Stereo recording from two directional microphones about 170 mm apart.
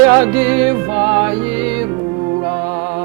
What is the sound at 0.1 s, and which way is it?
Music, 10° right (ahead or behind).